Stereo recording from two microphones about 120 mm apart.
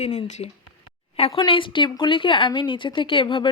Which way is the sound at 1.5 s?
45° left (ahead or behind).